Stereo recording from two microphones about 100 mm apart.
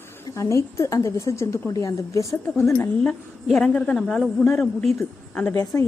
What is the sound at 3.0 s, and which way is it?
A woman's voice, 10° left (ahead or behind).